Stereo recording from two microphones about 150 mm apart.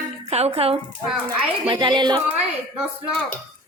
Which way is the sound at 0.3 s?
45° right (ahead or behind).